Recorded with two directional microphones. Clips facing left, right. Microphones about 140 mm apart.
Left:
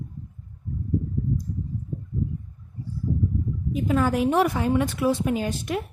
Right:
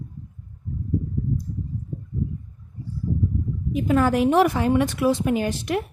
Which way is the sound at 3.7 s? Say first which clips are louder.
Right 3 dB; 70° right (ahead or behind).